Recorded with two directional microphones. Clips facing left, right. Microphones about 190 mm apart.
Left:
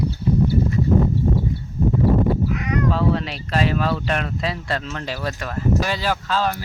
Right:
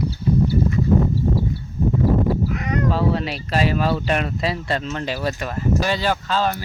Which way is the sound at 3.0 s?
5° right (ahead or behind).